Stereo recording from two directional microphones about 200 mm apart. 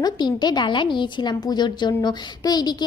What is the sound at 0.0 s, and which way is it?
A woman's voice, 20° left (ahead or behind).